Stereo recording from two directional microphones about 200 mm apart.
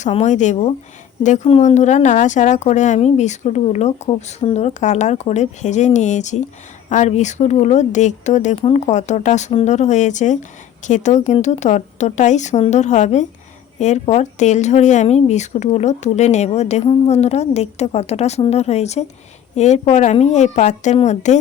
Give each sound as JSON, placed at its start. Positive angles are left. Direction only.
{"t": 0.0, "sound": "speech", "side_deg": 35}